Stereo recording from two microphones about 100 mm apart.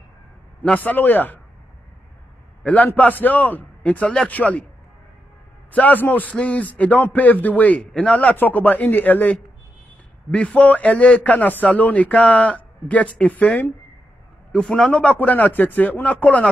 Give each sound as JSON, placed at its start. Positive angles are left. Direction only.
{"t": 0.7, "sound": "a man's voice", "side_deg": 20}
{"t": 2.6, "sound": "a man's voice", "side_deg": 15}
{"t": 5.7, "sound": "a man's voice", "side_deg": 15}
{"t": 14.5, "sound": "a man's voice", "side_deg": 5}